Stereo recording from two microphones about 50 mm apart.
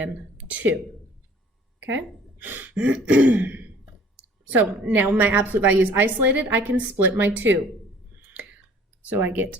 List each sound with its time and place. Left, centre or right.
0.5 s a woman's voice: right
2.4 s a sound: right
2.7 s throat clearing: right
5.1 s a woman's voice: right
8.1 s a sound: right
9.0 s a woman's voice: right